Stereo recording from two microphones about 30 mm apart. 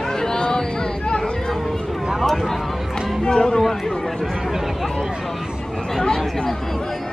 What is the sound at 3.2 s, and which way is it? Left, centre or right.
Speech, left.